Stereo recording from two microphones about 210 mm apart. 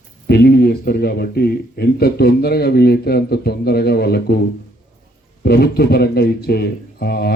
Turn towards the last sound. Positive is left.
turn(degrees=50)  # may be behind; listen again after turning